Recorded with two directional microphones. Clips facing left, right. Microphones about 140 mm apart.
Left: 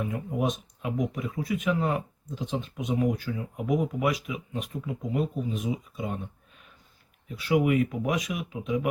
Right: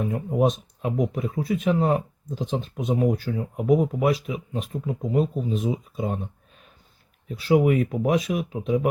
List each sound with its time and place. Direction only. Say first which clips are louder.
0.0 s speech: right 6 dB; 35° right (ahead or behind)
7.3 s speech: right 4 dB; 35° right (ahead or behind)